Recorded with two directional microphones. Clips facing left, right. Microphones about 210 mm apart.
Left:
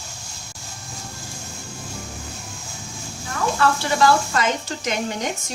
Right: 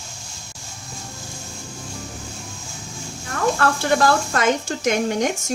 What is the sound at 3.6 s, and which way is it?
Speech, 50° right (ahead or behind).